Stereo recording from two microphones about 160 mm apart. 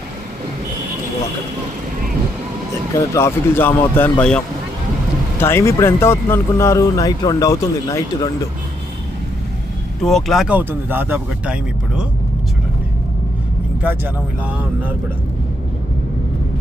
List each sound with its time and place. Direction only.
2.9 s speech: 15° left (ahead or behind)
10.0 s speech: centre (ahead or behind)